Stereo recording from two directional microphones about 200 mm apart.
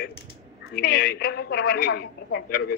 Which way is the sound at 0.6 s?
55° left (ahead or behind).